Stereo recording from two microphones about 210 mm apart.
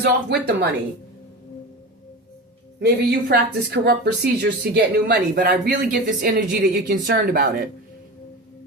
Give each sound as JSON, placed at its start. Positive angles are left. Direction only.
{"t": 0.0, "sound": "speech", "side_deg": -50}
{"t": 2.8, "sound": "speech", "side_deg": -50}